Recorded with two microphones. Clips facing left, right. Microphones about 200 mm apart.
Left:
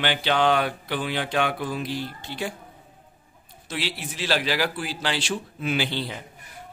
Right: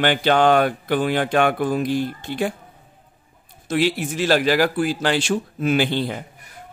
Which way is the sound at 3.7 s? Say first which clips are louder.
Right 11 dB; 50° right (ahead or behind).